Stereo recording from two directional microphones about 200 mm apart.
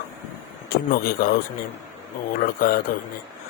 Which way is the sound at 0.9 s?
50° left (ahead or behind).